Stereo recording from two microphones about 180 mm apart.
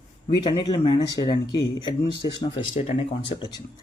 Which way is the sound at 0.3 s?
25° left (ahead or behind).